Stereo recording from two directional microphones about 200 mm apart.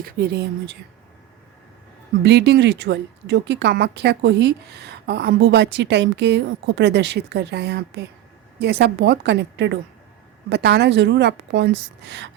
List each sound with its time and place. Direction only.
0.0 s speech: 50° right (ahead or behind)
2.2 s speech: 55° right (ahead or behind)